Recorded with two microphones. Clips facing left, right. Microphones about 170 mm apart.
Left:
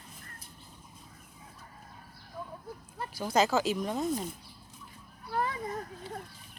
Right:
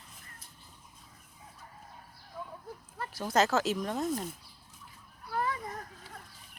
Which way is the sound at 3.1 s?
Centre (ahead or behind).